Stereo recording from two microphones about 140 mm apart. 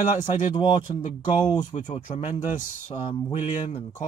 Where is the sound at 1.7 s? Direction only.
60° left (ahead or behind).